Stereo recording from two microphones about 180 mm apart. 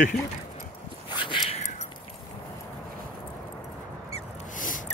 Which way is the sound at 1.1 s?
25° left (ahead or behind).